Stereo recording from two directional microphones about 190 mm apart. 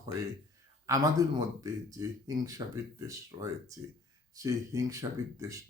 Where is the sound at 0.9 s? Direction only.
20° right (ahead or behind).